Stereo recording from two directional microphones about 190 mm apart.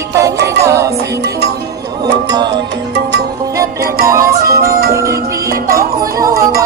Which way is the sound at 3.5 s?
15° right (ahead or behind).